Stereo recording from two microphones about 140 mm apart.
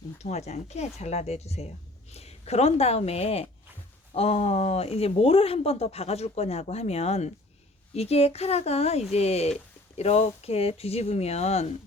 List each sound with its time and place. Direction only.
0.2 s speech: 50° left (ahead or behind)